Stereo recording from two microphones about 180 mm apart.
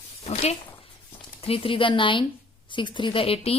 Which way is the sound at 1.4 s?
30° left (ahead or behind).